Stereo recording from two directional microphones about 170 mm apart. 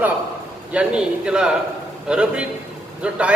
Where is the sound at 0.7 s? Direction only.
5° right (ahead or behind).